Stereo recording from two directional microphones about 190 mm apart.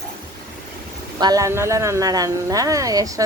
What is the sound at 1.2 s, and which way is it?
A woman's voice, 20° right (ahead or behind).